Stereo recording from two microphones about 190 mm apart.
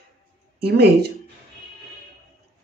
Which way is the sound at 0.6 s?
60° right (ahead or behind).